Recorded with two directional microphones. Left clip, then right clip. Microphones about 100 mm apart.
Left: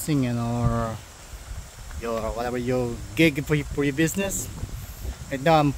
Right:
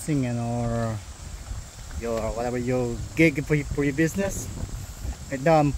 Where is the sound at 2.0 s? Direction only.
5° left (ahead or behind).